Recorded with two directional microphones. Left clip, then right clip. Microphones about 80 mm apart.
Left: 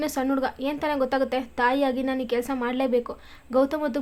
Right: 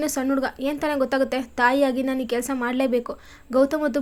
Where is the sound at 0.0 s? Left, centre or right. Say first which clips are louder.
Right 1 dB; right.